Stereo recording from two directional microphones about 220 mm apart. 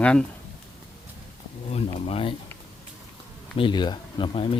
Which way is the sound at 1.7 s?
30° left (ahead or behind).